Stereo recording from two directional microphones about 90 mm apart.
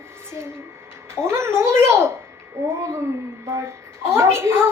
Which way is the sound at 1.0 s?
30° right (ahead or behind).